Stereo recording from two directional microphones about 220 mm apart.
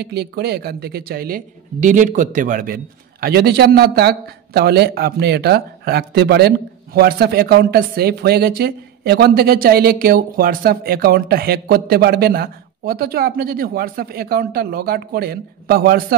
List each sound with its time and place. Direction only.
0.0 s a man's voice: 45° right (ahead or behind)